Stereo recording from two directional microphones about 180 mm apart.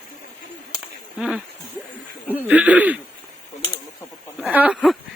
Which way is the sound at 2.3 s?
10° right (ahead or behind).